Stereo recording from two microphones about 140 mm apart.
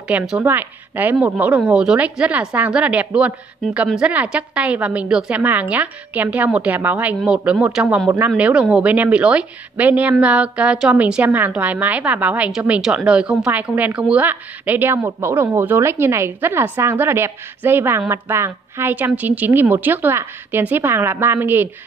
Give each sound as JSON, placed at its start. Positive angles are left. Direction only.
{"t": 0.4, "sound": "a woman's voice", "side_deg": -15}